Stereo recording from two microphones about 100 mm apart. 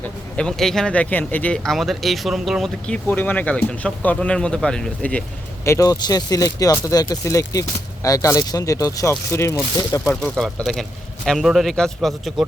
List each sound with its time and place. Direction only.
0.3 s speech: 5° left (ahead or behind)
1.5 s speech: 5° left (ahead or behind)
2.9 s speech: 15° left (ahead or behind)
5.6 s speech: 30° left (ahead or behind)
10.2 s speech: 5° left (ahead or behind)